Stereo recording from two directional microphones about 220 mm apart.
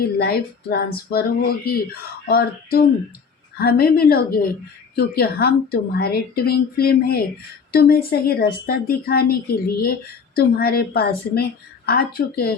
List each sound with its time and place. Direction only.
0.2 s a woman's voice: 45° left (ahead or behind)